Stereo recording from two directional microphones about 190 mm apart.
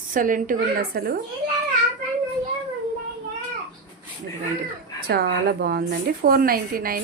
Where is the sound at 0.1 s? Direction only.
45° right (ahead or behind).